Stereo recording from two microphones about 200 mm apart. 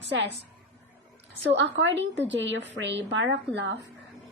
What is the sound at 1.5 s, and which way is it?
A woman's voice, 65° right (ahead or behind).